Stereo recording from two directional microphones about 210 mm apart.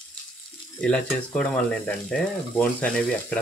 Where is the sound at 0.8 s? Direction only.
5° left (ahead or behind).